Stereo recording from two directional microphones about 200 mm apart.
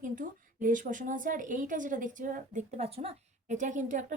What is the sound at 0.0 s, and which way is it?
A woman's voice, 40° right (ahead or behind).